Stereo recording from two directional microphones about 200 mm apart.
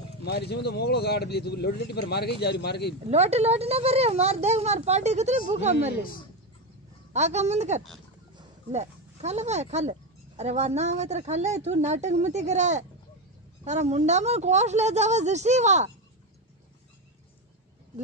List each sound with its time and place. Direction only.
0.2 s speech: 55° left (ahead or behind)
3.1 s speech: 35° right (ahead or behind)
7.1 s speech: 35° right (ahead or behind)